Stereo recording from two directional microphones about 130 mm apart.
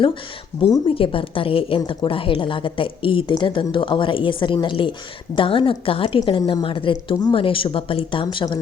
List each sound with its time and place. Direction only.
0.9 s a woman's voice: 45° left (ahead or behind)